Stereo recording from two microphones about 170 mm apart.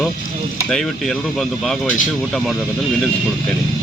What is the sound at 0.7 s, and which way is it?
Speech, 5° left (ahead or behind).